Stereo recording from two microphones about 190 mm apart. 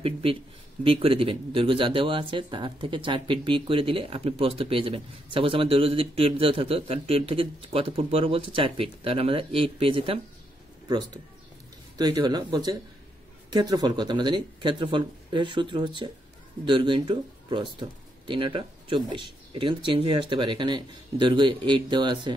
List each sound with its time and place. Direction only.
0.0 s speech: 30° right (ahead or behind)
12.2 s speech: 25° right (ahead or behind)